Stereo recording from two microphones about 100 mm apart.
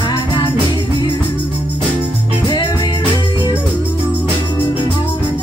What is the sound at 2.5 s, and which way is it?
Music, 40° left (ahead or behind).